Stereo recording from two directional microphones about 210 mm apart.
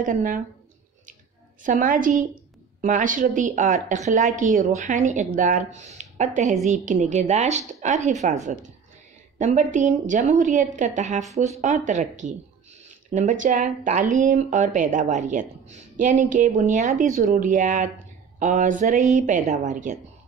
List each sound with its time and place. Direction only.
0.0 s speech: 40° right (ahead or behind)
1.6 s speech: 40° right (ahead or behind)